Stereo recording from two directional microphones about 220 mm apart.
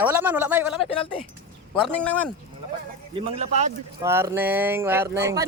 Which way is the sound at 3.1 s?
30° right (ahead or behind).